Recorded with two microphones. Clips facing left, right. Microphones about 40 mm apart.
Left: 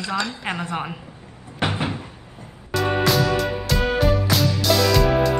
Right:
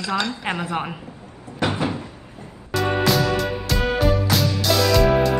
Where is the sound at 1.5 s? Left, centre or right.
Left.